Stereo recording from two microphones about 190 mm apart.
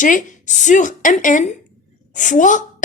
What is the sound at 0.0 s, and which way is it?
A woman's voice, 45° left (ahead or behind).